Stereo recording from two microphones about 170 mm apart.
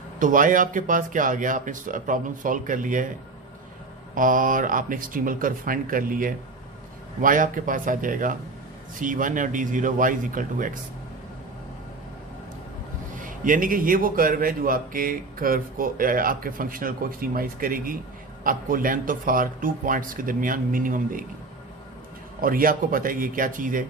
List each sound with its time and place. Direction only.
0.2 s speech: 50° right (ahead or behind)
4.1 s speech: 55° right (ahead or behind)
13.1 s a man's voice: 50° right (ahead or behind)
22.4 s a man's voice: 55° right (ahead or behind)